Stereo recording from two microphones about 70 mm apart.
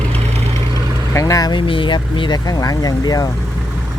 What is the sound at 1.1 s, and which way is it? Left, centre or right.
Speech, left.